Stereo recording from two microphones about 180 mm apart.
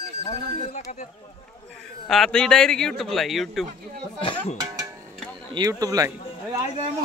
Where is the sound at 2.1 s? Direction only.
5° left (ahead or behind).